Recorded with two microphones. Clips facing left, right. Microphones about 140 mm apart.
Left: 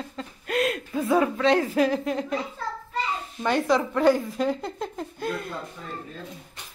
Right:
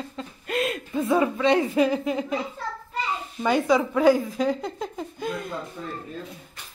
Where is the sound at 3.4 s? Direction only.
Centre (ahead or behind).